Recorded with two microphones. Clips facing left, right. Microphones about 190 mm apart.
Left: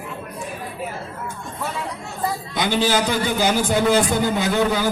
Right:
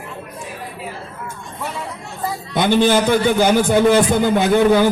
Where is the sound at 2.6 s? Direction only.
55° right (ahead or behind).